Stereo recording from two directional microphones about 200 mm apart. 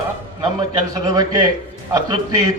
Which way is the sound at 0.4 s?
20° right (ahead or behind).